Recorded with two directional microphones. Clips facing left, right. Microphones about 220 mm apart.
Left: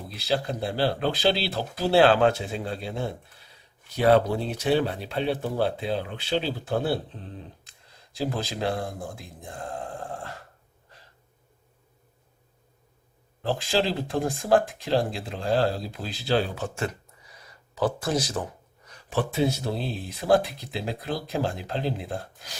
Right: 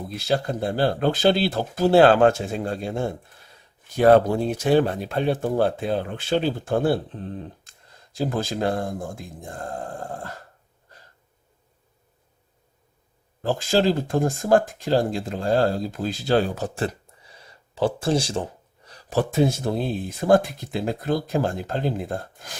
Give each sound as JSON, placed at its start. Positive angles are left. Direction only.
{"t": 0.1, "sound": "speech", "side_deg": -45}
{"t": 13.4, "sound": "speech", "side_deg": -45}